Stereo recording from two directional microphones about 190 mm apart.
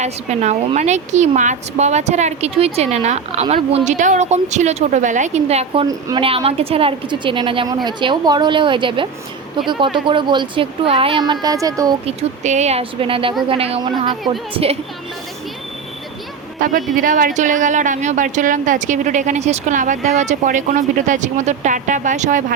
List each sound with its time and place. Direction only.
0.0 s a woman's voice: 35° right (ahead or behind)
5.8 s speech: 20° right (ahead or behind)
6.2 s speech: 30° right (ahead or behind)
12.0 s a woman's voice: 40° right (ahead or behind)
16.6 s a woman's voice: 45° right (ahead or behind)